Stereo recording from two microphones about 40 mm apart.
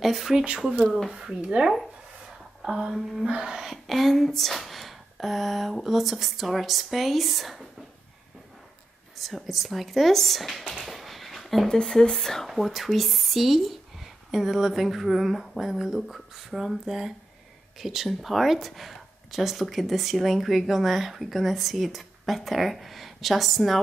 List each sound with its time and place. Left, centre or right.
0.0 s speech: centre
1.1 s a sound: centre
1.6 s speech: centre
2.2 s a sound: centre
3.7 s speech: centre
9.1 s speech: centre
10.9 s a sound: centre
11.6 s speech: centre
12.4 s speech: centre